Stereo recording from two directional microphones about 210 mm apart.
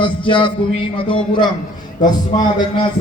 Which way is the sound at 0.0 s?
25° left (ahead or behind).